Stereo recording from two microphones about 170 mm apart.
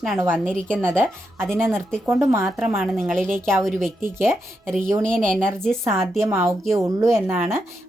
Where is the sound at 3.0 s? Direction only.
5° left (ahead or behind).